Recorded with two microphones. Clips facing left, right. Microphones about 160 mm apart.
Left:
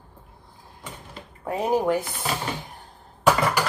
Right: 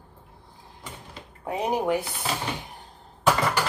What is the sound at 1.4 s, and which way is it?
Speech, 15° right (ahead or behind).